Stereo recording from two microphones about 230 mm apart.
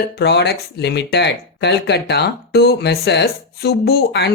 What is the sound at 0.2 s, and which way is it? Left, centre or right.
Speech, left.